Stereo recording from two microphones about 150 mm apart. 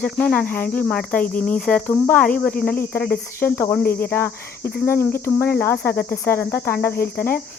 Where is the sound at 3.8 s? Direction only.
90° left.